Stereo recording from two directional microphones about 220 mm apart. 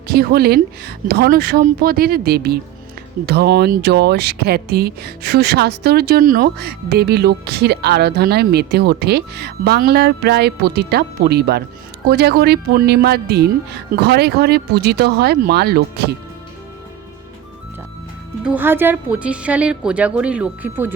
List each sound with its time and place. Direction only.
0.1 s speech: 45° right (ahead or behind)
18.4 s speech: 10° right (ahead or behind)